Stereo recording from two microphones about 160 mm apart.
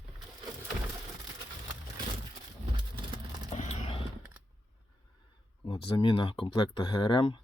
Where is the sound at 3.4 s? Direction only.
45° left (ahead or behind).